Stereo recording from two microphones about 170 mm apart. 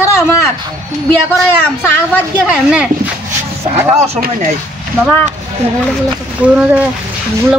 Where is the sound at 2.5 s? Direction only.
5° right (ahead or behind).